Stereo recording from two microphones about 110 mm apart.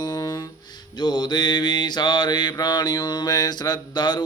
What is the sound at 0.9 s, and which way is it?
Mantra, 40° left (ahead or behind).